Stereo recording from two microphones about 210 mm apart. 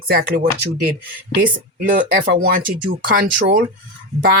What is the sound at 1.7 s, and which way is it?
Speech, 40° right (ahead or behind).